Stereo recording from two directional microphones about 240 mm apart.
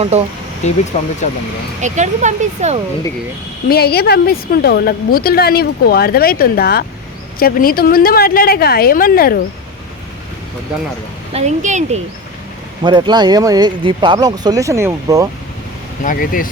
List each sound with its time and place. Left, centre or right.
0.6 s speech: left
1.8 s speech: right
3.7 s a woman's voice: left
11.3 s speech: right
12.8 s speech: centre
16.0 s a woman's voice: left